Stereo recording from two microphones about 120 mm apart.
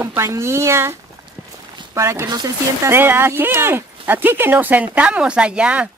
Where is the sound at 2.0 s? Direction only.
25° right (ahead or behind).